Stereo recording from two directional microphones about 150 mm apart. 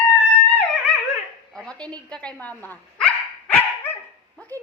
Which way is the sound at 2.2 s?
10° left (ahead or behind).